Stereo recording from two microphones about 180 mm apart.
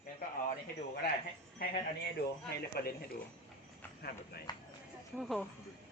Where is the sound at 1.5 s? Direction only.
60° left (ahead or behind).